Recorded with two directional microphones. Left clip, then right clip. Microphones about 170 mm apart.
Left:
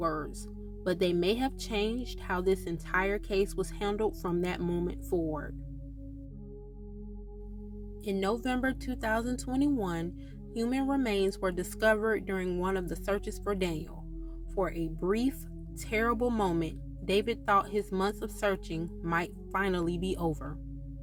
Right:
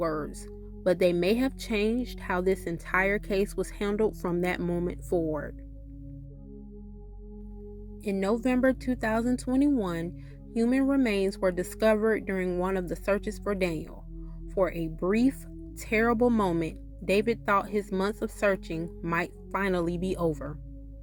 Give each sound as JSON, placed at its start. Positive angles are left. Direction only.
{"t": 0.0, "sound": "speech", "side_deg": -35}
{"t": 8.0, "sound": "speech", "side_deg": -30}